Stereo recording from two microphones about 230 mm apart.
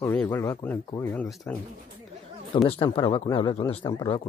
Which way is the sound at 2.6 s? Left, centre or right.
Left.